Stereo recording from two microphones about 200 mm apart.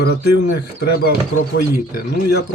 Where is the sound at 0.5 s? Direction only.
55° left (ahead or behind).